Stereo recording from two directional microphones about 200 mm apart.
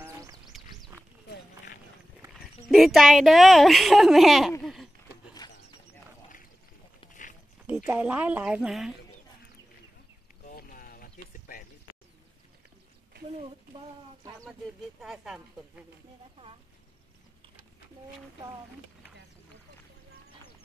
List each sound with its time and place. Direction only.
0.0 s a sound: 15° right (ahead or behind)
2.7 s speech: centre (ahead or behind)
5.4 s a sound: 20° left (ahead or behind)
7.6 s speech: 10° right (ahead or behind)
10.4 s boat: 40° left (ahead or behind)
15.0 s speech: centre (ahead or behind)